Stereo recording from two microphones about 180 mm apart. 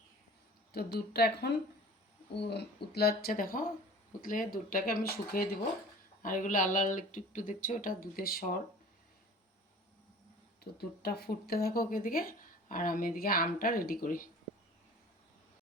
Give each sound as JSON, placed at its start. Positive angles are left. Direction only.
{"t": 0.7, "sound": "speech", "side_deg": 60}
{"t": 10.6, "sound": "speech", "side_deg": 60}